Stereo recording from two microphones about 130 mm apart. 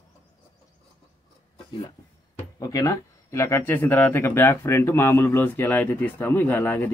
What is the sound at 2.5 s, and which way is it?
Speech, 30° left (ahead or behind).